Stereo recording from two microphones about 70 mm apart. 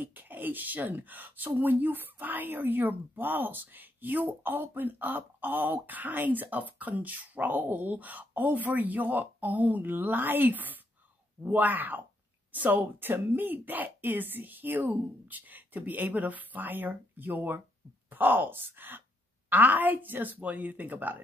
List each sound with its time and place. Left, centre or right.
0.0 s speech: right